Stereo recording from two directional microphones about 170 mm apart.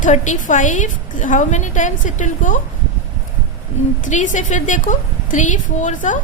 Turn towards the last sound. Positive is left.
turn(degrees=45)  # may be behind; listen again after turning